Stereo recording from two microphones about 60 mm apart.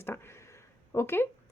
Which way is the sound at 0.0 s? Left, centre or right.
Left.